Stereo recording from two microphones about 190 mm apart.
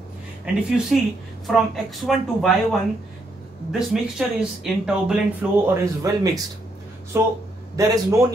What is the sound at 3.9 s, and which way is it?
A woman's voice, 5° right (ahead or behind).